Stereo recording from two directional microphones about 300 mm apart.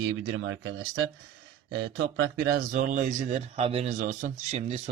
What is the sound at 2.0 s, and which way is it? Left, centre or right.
Speech, right.